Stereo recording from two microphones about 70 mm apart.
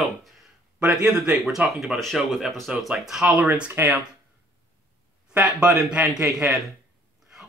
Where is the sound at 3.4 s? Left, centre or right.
Centre.